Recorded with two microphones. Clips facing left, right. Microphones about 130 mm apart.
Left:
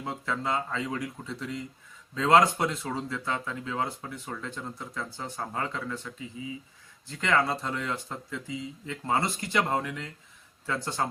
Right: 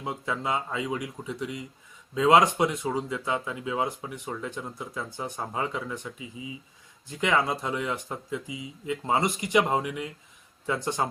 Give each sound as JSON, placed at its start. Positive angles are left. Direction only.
{"t": 0.0, "sound": "speech", "side_deg": -15}